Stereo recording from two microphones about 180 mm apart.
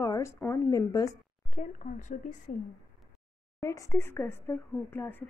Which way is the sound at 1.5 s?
45° left (ahead or behind).